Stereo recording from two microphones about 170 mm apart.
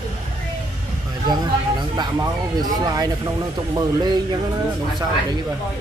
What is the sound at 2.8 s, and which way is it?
Speech, 25° right (ahead or behind).